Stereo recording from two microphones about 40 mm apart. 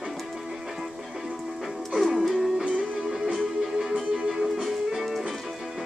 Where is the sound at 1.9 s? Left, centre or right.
Centre.